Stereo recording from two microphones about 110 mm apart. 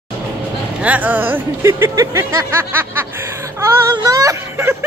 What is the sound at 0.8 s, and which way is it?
Speech, 15° right (ahead or behind).